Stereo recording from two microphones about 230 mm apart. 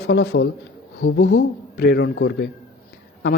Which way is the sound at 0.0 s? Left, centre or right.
Left.